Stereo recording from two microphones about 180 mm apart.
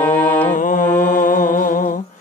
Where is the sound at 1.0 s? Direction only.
45° left (ahead or behind).